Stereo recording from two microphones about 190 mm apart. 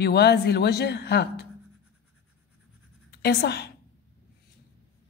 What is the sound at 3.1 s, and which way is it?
Speech, 60° left (ahead or behind).